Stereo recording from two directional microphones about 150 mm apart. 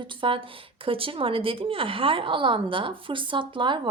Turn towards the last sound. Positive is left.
turn(degrees=-30)  # may be behind; listen again after turning